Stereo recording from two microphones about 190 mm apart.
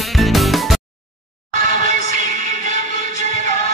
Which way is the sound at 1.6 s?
40° right (ahead or behind).